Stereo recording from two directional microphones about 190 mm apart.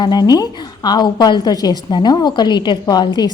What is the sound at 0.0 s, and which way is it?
A woman's voice, 20° left (ahead or behind).